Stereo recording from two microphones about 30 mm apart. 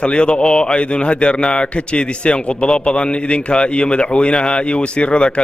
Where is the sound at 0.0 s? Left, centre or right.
Left.